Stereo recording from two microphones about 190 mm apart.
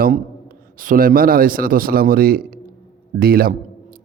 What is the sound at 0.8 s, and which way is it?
A man's voice, 45° right (ahead or behind).